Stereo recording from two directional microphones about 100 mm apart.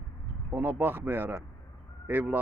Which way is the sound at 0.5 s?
20° right (ahead or behind).